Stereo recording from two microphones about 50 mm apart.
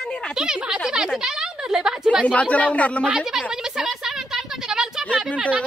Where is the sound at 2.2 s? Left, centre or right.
Left.